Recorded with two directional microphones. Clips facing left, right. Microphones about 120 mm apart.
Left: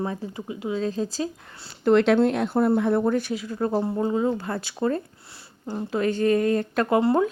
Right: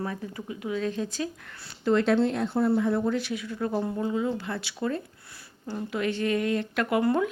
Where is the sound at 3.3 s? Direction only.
35° left (ahead or behind).